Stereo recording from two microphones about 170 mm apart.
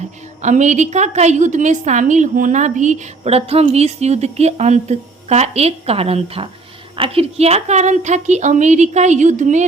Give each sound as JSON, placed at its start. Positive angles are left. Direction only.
{"t": 0.4, "sound": "a woman's voice", "side_deg": -45}